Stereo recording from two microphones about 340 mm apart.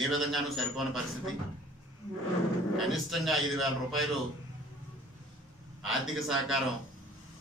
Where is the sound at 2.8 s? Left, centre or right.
Centre.